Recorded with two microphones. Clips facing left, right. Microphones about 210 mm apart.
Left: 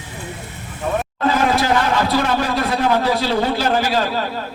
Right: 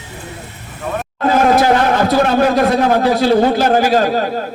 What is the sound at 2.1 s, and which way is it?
A man's voice, 50° right (ahead or behind).